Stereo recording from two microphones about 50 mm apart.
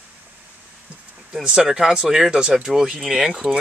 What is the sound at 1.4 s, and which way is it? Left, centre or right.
Speech, centre.